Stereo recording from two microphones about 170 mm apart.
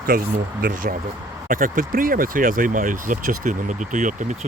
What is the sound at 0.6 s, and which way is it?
Speech, 55° right (ahead or behind).